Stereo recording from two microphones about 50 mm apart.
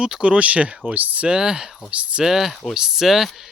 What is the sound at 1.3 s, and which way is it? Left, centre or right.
Speech, centre.